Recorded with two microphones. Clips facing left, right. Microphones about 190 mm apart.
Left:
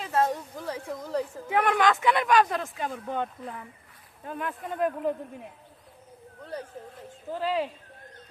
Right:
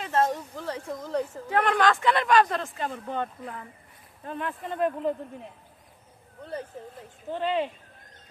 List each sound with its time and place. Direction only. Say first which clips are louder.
0.0 s a sound: right 1 dB; 5° left (ahead or behind)
0.3 s speech: right 1 dB; 5° left (ahead or behind)
7.3 s speech: right 1 dB; 5° left (ahead or behind)